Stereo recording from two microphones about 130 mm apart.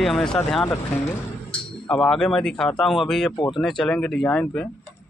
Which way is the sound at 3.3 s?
40° left (ahead or behind).